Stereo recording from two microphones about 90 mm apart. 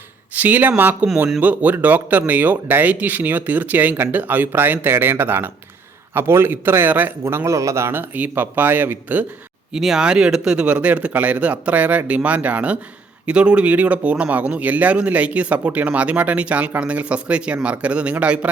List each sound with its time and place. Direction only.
0.3 s speech: 20° right (ahead or behind)
9.7 s speech: 5° right (ahead or behind)